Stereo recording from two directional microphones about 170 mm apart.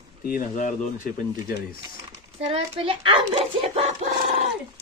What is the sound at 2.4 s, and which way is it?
A child's voice, 35° right (ahead or behind).